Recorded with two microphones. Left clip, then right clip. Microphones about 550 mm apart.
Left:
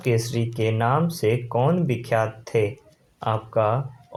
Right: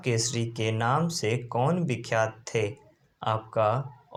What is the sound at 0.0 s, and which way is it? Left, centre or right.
Speech, left.